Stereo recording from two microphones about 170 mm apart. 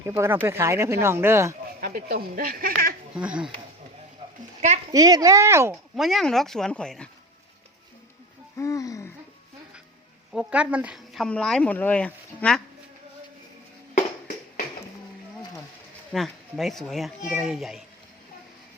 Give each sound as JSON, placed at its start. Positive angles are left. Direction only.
{"t": 0.2, "sound": "speech", "side_deg": -15}
{"t": 1.8, "sound": "speech", "side_deg": -60}
{"t": 3.2, "sound": "speech", "side_deg": -5}
{"t": 4.9, "sound": "speech", "side_deg": -20}
{"t": 6.0, "sound": "speech", "side_deg": 0}
{"t": 8.5, "sound": "a sound", "side_deg": 20}
{"t": 10.3, "sound": "speech", "side_deg": -5}
{"t": 13.9, "sound": "a sound", "side_deg": 50}
{"t": 16.1, "sound": "speech", "side_deg": 0}